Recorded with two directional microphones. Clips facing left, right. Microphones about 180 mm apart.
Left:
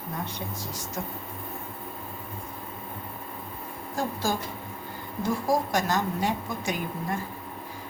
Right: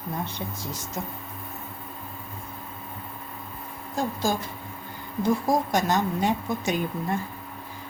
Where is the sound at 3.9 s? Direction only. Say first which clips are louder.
Right 2 dB; 15° right (ahead or behind).